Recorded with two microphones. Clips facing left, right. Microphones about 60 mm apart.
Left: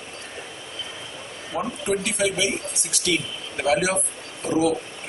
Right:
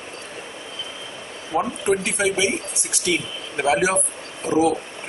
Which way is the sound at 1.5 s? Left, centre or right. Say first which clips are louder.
Right 4 dB; right.